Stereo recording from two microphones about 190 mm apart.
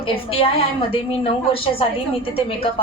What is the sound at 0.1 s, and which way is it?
A woman's voice, 30° left (ahead or behind).